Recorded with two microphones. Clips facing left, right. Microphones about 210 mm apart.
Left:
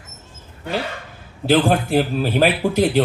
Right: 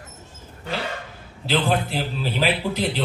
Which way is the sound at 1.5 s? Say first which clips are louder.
Left 6 dB; 50° left (ahead or behind).